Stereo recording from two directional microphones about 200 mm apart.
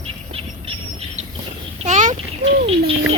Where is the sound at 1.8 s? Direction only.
40° right (ahead or behind).